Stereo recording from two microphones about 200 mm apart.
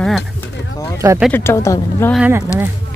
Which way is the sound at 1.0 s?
10° right (ahead or behind).